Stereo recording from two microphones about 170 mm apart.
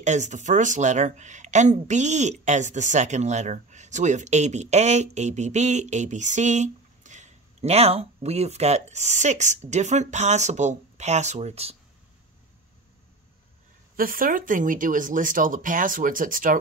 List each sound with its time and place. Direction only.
0.0 s speech: 45° right (ahead or behind)
13.9 s speech: 55° right (ahead or behind)